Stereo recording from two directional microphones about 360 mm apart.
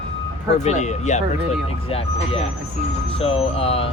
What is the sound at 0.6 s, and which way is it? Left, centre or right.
Speech, centre.